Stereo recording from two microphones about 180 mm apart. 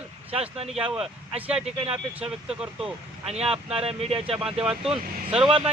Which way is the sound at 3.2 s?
35° right (ahead or behind).